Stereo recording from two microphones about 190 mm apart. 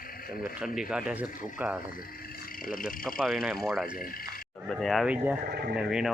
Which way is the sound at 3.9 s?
50° left (ahead or behind).